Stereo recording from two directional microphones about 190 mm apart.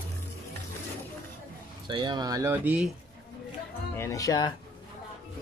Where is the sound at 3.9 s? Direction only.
15° left (ahead or behind).